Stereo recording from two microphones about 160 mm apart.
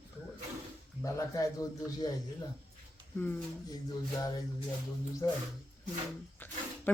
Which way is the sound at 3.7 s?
25° left (ahead or behind).